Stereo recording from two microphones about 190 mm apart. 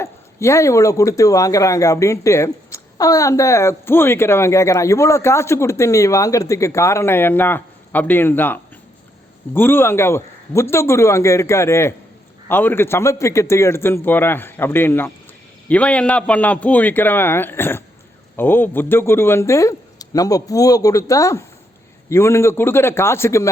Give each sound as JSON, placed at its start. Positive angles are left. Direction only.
{"t": 0.0, "sound": "speech", "side_deg": 15}
{"t": 9.6, "sound": "speech", "side_deg": 10}